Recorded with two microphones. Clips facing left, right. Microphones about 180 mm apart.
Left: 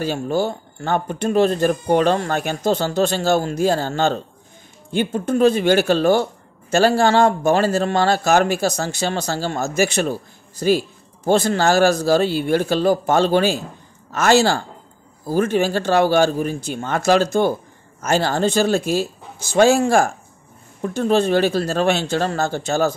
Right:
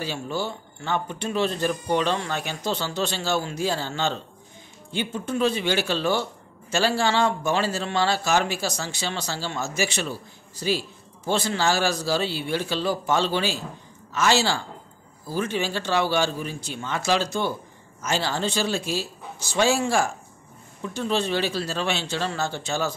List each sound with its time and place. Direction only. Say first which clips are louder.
0.0 s speech: left 8 dB; 45° left (ahead or behind)